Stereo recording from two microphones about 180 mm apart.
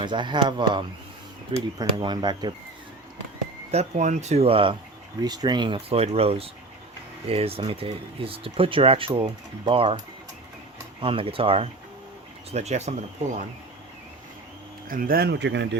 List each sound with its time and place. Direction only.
0.0 s speech: 25° right (ahead or behind)
3.7 s speech: 40° right (ahead or behind)
11.0 s speech: 30° right (ahead or behind)
14.8 s speech: 50° right (ahead or behind); by 15.7 s 75° right (ahead or behind)